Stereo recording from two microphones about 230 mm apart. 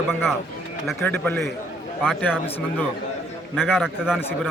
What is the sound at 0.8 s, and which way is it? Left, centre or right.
Speech, centre.